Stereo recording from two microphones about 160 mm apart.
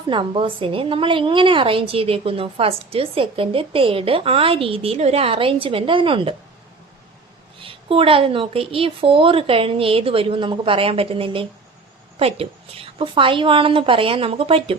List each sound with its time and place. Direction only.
0.1 s a woman's voice: 30° right (ahead or behind)
7.6 s a woman's voice: 35° right (ahead or behind)